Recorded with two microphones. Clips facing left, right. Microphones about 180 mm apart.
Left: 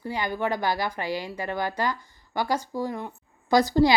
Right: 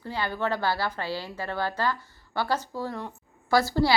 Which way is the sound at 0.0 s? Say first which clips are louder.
Left 2 dB; 15° left (ahead or behind).